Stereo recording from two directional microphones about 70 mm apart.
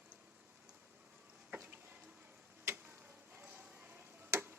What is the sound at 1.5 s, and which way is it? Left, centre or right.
Music, right.